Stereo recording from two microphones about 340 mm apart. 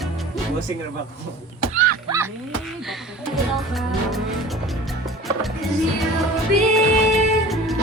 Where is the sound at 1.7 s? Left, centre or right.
Right.